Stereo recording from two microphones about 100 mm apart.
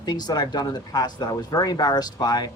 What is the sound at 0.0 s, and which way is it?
Speech, 45° left (ahead or behind).